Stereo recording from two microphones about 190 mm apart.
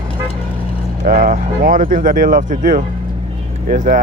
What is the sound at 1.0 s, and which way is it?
Speech, 45° right (ahead or behind).